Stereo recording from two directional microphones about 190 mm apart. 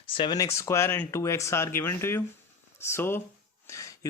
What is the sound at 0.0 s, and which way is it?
Speech, 25° left (ahead or behind).